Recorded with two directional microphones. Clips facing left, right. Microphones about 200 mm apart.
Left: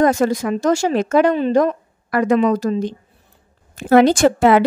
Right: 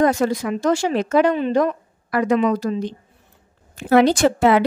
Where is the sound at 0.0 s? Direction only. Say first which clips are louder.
Left 2 dB; 45° left (ahead or behind).